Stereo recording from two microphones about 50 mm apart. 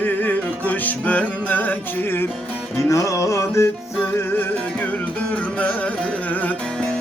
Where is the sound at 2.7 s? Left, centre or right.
Left.